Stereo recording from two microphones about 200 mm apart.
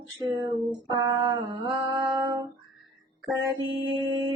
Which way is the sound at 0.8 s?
20° right (ahead or behind).